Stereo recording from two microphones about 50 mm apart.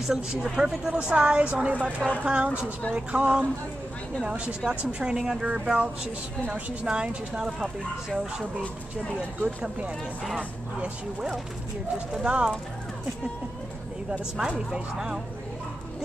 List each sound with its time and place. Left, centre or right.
0.0 s speech: centre
0.9 s a woman's voice: right
9.4 s a woman's voice: right
12.1 s a woman's voice: centre
14.7 s speech: centre